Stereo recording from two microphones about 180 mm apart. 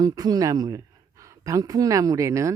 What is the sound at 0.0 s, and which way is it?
Speech, 20° right (ahead or behind).